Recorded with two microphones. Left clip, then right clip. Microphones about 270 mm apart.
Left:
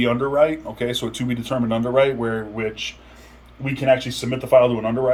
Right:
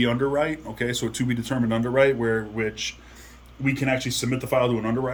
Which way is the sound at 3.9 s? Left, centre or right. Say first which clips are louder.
Left 12 dB; centre.